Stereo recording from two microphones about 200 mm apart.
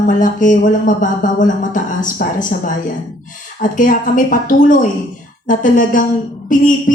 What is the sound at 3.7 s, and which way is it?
Speech, 40° left (ahead or behind).